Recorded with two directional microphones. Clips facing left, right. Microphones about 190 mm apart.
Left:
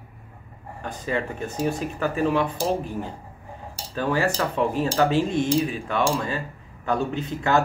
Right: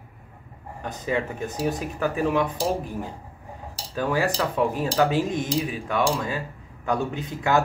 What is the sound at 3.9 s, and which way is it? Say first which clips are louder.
Speech: left 1 dB; 10° right (ahead or behind).